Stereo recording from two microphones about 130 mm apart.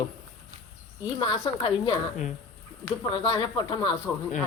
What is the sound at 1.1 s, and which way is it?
Speech, 40° left (ahead or behind).